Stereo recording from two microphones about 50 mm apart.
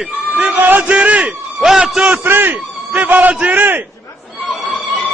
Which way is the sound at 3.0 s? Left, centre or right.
Right.